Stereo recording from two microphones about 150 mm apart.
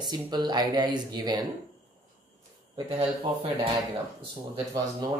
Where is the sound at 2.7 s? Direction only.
35° right (ahead or behind).